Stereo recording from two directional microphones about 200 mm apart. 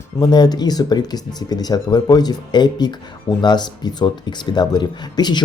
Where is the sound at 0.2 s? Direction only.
20° left (ahead or behind).